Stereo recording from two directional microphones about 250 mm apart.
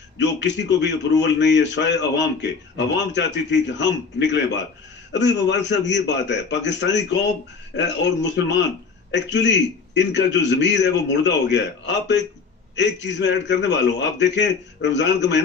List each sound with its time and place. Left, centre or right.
0.2 s a man's voice: left